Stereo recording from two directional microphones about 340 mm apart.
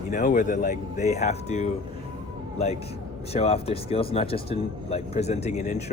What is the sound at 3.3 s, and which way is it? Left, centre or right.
Speech, centre.